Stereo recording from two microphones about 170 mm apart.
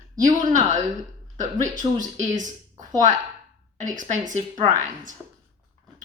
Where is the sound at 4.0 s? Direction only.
50° right (ahead or behind).